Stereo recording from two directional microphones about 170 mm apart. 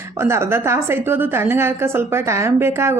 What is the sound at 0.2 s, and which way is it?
A woman's voice, 15° right (ahead or behind).